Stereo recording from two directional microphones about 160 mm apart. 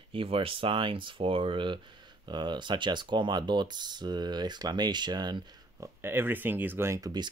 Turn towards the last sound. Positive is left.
turn(degrees=-25)  # may be behind; listen again after turning